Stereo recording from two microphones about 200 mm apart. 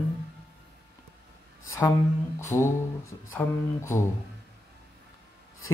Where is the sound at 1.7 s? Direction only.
15° left (ahead or behind).